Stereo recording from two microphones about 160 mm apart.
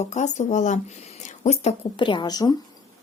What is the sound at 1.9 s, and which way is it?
Speech, 30° left (ahead or behind).